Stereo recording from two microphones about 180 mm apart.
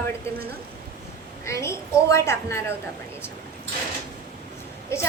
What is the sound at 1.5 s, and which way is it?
A woman's voice, 15° left (ahead or behind).